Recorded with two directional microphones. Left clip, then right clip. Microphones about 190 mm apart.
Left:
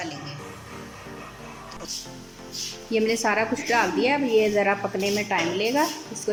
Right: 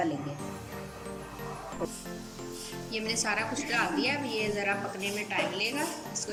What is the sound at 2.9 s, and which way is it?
A woman's voice, 35° left (ahead or behind).